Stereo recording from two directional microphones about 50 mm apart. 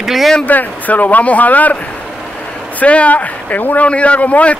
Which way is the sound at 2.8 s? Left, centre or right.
Left.